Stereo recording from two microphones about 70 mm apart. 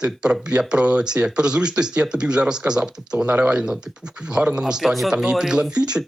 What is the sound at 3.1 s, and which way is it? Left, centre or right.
Speech, right.